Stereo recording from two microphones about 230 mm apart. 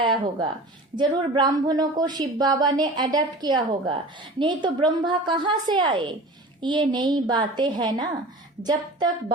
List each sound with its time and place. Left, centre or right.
0.0 s speech: right